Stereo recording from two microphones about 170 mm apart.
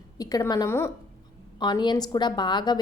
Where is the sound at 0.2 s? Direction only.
20° left (ahead or behind).